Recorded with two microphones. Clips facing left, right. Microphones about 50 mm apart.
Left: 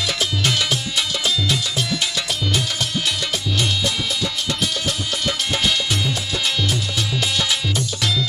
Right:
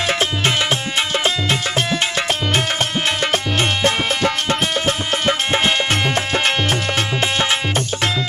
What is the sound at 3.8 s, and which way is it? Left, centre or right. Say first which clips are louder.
Music: right 6 dB; right.